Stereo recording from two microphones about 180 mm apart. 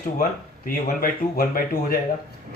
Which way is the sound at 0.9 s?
55° left (ahead or behind).